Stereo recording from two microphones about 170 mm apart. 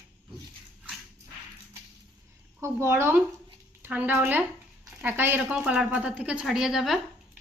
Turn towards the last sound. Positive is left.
turn(degrees=0)  # may be behind; listen again after turning